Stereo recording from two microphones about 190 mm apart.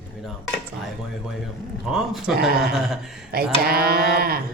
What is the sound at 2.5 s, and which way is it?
Speech, 55° right (ahead or behind).